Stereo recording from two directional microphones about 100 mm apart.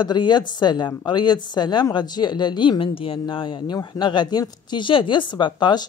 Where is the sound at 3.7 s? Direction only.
45° left (ahead or behind).